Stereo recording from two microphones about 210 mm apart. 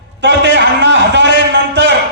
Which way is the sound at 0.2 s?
55° right (ahead or behind).